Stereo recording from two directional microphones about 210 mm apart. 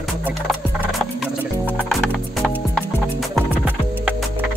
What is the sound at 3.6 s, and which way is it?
Music, 10° right (ahead or behind).